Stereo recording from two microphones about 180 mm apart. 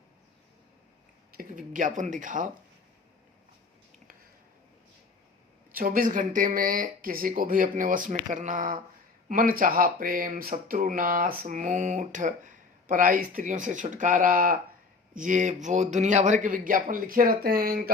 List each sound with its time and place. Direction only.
1.3 s speech: 50° right (ahead or behind)
5.7 s speech: 50° right (ahead or behind)